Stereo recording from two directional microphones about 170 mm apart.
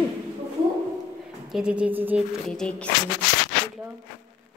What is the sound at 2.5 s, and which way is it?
Speech, 5° left (ahead or behind).